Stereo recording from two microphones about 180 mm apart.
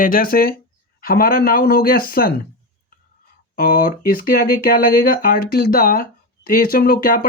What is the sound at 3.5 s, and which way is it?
Speech, 55° left (ahead or behind).